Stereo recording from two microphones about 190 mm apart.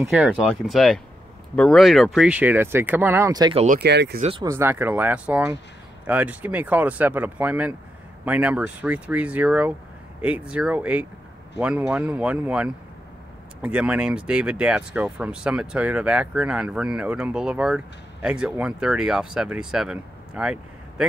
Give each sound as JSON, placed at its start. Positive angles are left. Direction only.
{"t": 0.1, "sound": "speech", "side_deg": 0}
{"t": 3.5, "sound": "speech", "side_deg": -40}
{"t": 3.8, "sound": "speech", "side_deg": -60}
{"t": 4.2, "sound": "speech", "side_deg": -30}
{"t": 4.5, "sound": "speech", "side_deg": -10}